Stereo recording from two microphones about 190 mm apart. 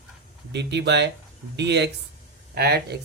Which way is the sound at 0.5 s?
65° right (ahead or behind).